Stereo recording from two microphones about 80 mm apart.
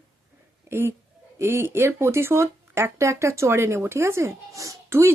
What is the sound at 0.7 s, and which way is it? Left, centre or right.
Speech, right.